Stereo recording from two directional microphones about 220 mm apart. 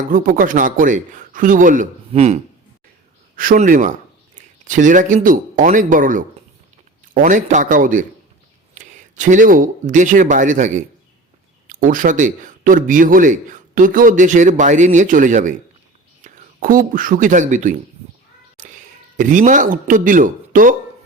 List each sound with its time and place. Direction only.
0.0 s speech: 40° right (ahead or behind)
19.1 s speech: 35° right (ahead or behind)